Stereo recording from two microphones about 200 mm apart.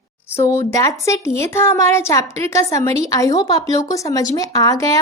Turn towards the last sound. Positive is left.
turn(degrees=15)  # may be behind; listen again after turning